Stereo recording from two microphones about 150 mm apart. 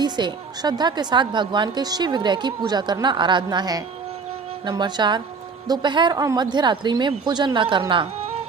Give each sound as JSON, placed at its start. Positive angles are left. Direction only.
{"t": 0.0, "sound": "a woman's voice", "side_deg": -30}